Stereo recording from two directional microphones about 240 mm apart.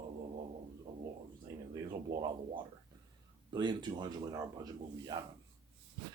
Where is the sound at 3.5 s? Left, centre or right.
Centre.